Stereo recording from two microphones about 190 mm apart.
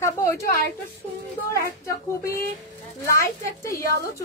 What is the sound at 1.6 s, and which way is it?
A woman's voice, 15° left (ahead or behind).